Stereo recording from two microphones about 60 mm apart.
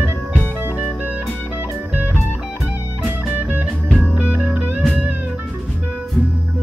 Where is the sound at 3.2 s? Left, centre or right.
Right.